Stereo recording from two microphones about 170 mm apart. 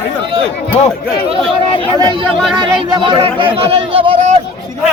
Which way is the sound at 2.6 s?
30° right (ahead or behind).